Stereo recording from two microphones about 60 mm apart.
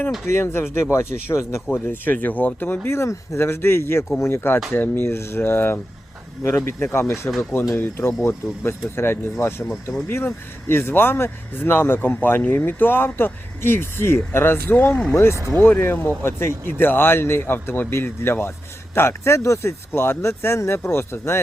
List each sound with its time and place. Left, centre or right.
0.3 s speech: left
1.7 s speech: left
2.8 s speech: left
15.1 s speech: left
15.4 s speech: right
15.8 s speech: left